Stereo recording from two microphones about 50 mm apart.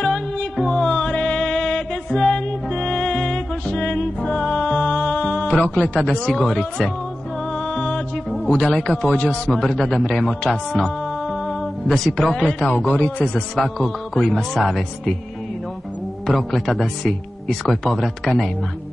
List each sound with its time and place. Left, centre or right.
0.0 s music: centre
4.7 s music: left
6.4 s speech: centre
7.5 s music: centre
8.5 s speech: centre
9.5 s speech: centre
10.7 s music: centre
12.4 s speech: centre
12.8 s speech: left
13.3 s speech: centre
16.3 s speech: centre